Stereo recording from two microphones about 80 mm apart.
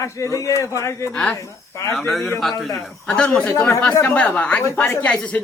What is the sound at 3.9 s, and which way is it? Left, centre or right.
Speech, left.